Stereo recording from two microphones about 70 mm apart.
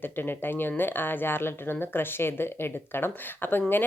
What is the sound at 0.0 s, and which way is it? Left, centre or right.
Speech, left.